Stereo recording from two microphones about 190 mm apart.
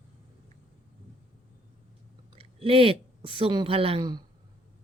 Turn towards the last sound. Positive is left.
turn(degrees=-25)  # may be behind; listen again after turning